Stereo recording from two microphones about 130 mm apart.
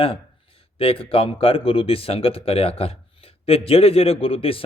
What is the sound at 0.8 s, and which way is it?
Speech, 45° left (ahead or behind).